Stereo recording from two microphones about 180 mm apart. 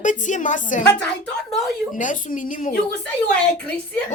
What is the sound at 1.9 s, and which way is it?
Speech, 45° left (ahead or behind).